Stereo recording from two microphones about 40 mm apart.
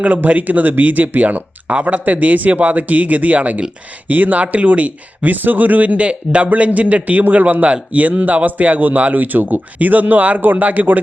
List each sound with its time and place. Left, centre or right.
0.0 s speech: right